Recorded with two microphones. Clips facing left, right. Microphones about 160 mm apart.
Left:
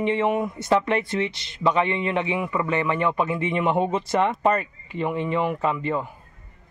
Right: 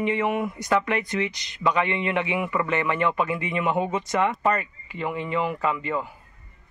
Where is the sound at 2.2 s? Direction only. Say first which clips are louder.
Left 1 dB; 10° right (ahead or behind).